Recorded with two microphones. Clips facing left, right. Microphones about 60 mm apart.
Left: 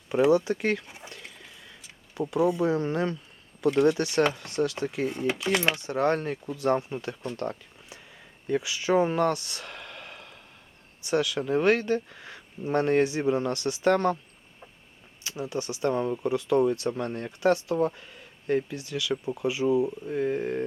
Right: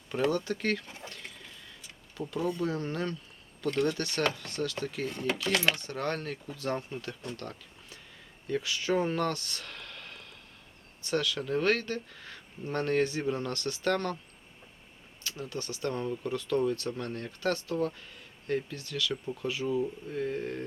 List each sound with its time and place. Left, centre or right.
0.1 s a sound: centre
2.3 s speech: centre
15.2 s speech: centre